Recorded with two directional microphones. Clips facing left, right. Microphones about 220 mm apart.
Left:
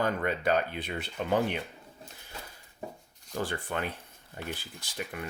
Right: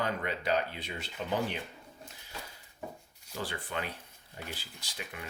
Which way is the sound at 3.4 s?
50° left (ahead or behind).